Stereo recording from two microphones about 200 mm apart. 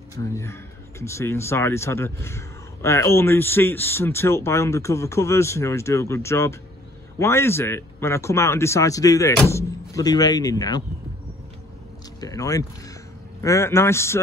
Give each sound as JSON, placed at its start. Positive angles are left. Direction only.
{"t": 0.1, "sound": "speech", "side_deg": 15}
{"t": 12.2, "sound": "speech", "side_deg": 15}